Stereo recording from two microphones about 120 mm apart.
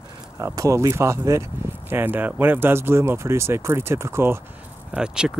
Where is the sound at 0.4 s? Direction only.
25° right (ahead or behind).